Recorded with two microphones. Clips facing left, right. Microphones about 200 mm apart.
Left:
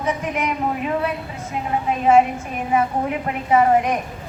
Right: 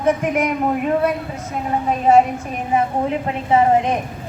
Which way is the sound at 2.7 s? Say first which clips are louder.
Right 1 dB; 30° right (ahead or behind).